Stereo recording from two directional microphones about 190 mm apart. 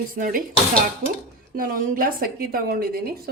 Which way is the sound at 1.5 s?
50° right (ahead or behind).